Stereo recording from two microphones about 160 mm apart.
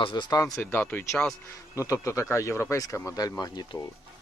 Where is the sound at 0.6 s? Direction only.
15° left (ahead or behind).